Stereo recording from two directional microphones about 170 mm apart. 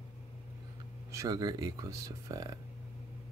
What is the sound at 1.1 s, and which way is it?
Speech, 20° right (ahead or behind).